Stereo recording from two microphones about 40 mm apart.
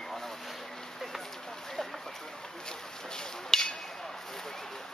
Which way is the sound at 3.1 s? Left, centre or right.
Centre.